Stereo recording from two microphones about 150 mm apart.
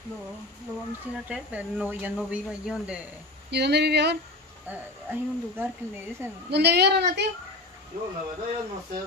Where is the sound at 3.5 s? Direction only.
90° right.